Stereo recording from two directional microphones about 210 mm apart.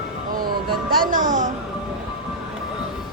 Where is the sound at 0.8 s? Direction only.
40° right (ahead or behind).